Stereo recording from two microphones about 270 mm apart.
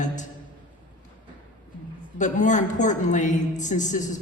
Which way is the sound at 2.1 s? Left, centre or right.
Left.